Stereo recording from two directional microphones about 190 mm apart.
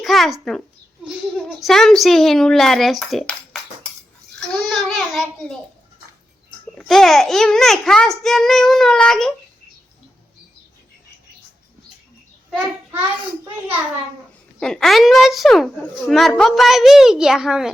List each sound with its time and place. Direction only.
0.0 s a sound: centre (ahead or behind)
1.0 s a woman's voice: centre (ahead or behind)
4.4 s babbling: centre (ahead or behind)
6.7 s a woman's voice: centre (ahead or behind)
12.5 s a child's voice: centre (ahead or behind)
14.6 s a woman's voice: 5° left (ahead or behind)